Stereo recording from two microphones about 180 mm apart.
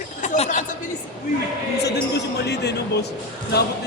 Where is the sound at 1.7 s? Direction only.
65° left (ahead or behind).